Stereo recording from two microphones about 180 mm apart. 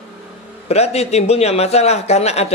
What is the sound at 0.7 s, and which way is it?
A man's voice, 35° left (ahead or behind).